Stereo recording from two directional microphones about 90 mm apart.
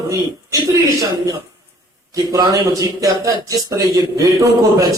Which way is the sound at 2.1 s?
45° right (ahead or behind).